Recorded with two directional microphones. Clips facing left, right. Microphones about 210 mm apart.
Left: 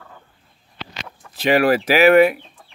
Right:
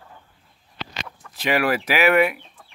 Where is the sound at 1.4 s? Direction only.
30° left (ahead or behind).